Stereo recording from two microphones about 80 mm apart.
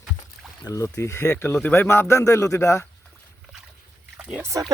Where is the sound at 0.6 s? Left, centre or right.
Left.